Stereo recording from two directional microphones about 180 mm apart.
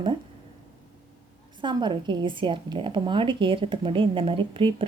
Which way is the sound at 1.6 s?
25° right (ahead or behind).